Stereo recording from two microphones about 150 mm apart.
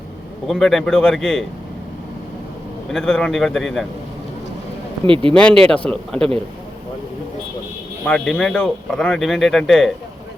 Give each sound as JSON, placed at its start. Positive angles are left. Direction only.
{"t": 0.4, "sound": "speech", "side_deg": 0}
{"t": 2.9, "sound": "speech", "side_deg": 5}
{"t": 5.0, "sound": "speech", "side_deg": -35}
{"t": 5.4, "sound": "speech", "side_deg": 5}
{"t": 8.0, "sound": "speech", "side_deg": 5}